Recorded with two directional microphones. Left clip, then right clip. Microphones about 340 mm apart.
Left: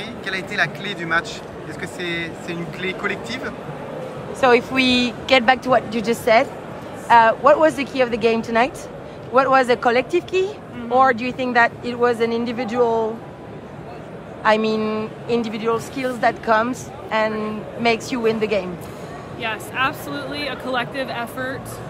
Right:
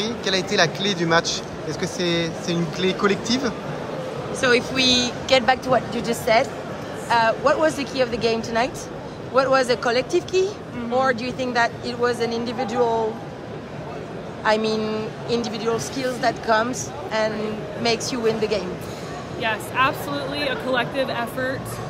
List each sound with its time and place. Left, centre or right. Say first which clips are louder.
0.0 s speech: right 4 dB; centre
4.4 s speech: left 4 dB; centre
14.4 s speech: left 3 dB; left
19.4 s speech: right 1 dB; centre